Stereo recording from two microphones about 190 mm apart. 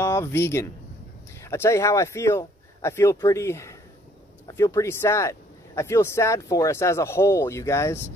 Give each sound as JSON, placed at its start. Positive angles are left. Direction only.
{"t": 0.0, "sound": "speech", "side_deg": 15}